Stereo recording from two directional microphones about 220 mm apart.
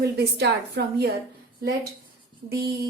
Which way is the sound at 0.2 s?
50° right (ahead or behind).